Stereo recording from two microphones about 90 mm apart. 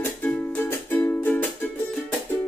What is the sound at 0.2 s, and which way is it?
Music, 25° left (ahead or behind).